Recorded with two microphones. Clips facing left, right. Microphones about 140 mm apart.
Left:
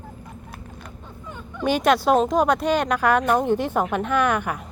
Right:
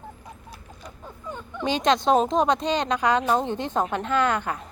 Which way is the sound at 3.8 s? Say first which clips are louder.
Left 3 dB; 20° right (ahead or behind).